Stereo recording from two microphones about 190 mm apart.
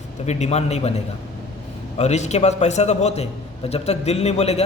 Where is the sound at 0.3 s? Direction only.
35° left (ahead or behind).